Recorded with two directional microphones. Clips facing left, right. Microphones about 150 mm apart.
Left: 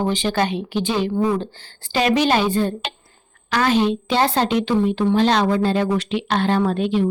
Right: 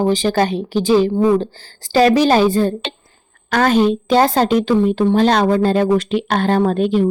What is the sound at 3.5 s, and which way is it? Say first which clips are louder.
A woman's voice: right 4 dB; 45° right (ahead or behind).